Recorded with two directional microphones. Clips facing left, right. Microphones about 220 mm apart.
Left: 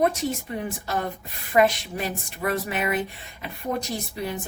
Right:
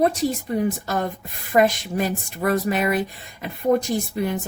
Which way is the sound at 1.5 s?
45° right (ahead or behind).